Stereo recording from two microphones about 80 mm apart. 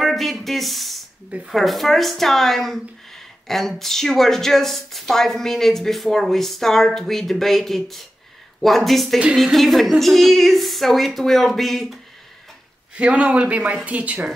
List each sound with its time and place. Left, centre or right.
0.0 s speech: centre
12.9 s a woman's voice: centre